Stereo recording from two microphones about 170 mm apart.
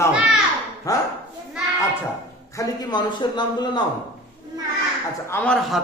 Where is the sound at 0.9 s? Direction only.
20° left (ahead or behind).